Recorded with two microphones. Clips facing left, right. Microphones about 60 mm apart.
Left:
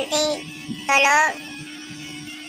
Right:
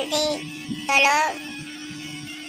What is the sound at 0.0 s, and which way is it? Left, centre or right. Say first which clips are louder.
Speech: left 2 dB; left.